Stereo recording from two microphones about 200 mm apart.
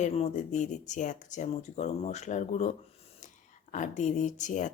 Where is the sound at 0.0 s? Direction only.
35° left (ahead or behind).